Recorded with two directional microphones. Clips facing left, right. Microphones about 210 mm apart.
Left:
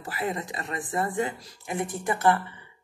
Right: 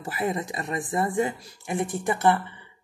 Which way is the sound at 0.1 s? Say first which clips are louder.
Right 3 dB; 20° right (ahead or behind).